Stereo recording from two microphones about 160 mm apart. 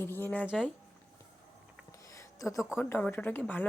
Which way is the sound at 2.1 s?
20° left (ahead or behind).